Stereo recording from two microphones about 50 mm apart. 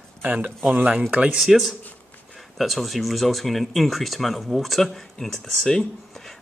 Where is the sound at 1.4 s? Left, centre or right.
Centre.